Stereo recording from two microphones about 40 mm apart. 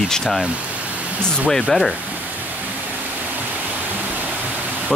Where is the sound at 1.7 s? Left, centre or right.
Left.